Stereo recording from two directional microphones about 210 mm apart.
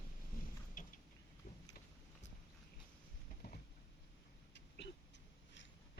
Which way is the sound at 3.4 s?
50° left (ahead or behind).